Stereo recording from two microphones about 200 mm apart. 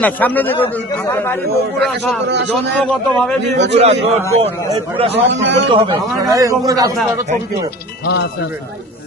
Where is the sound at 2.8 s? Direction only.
5° left (ahead or behind).